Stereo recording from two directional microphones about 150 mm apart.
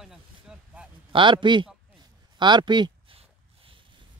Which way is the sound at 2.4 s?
30° right (ahead or behind).